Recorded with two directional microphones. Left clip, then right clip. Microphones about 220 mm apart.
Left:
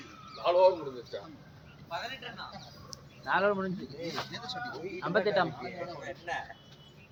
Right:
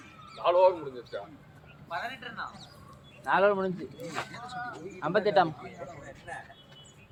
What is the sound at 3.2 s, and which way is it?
Speech, 45° right (ahead or behind).